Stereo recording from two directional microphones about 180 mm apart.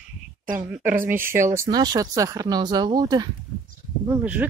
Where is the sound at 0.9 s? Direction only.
50° right (ahead or behind).